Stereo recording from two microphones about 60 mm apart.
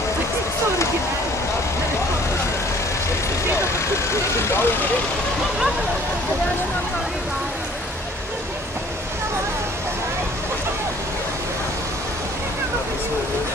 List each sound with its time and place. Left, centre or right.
4.1 s vehicle: left